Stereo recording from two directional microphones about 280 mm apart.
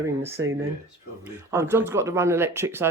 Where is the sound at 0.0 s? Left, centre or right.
Centre.